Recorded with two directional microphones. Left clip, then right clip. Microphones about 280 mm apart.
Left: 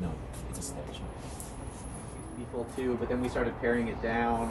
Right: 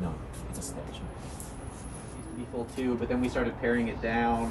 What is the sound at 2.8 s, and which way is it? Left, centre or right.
Speech, centre.